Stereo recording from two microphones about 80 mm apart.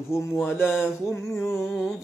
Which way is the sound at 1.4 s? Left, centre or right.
Centre.